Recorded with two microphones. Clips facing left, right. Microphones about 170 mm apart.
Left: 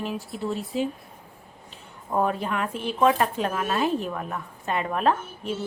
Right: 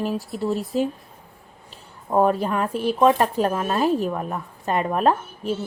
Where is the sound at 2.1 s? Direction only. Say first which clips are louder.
Right 5 dB; 35° right (ahead or behind).